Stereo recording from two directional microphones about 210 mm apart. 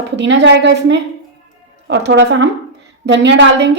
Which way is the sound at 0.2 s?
55° right (ahead or behind).